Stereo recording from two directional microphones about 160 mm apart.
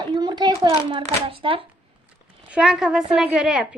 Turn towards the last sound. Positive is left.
turn(degrees=-5)  # may be behind; listen again after turning